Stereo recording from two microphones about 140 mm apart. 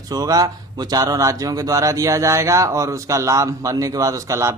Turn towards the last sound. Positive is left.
turn(degrees=-20)  # may be behind; listen again after turning